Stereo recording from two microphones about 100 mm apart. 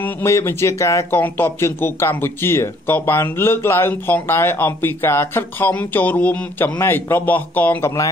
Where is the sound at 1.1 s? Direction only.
20° left (ahead or behind).